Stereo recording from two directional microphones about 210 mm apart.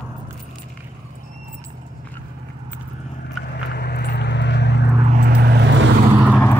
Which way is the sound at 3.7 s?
50° left (ahead or behind).